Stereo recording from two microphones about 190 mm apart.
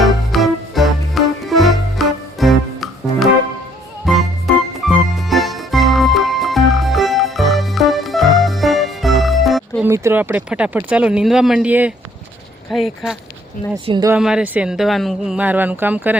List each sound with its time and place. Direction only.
0.0 s music: centre (ahead or behind)
9.8 s speech: 15° right (ahead or behind)
13.8 s speech: 25° right (ahead or behind)
14.1 s speech: 5° right (ahead or behind)